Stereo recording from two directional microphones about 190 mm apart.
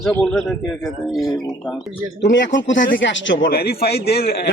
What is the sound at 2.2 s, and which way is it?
Speech, 70° left (ahead or behind).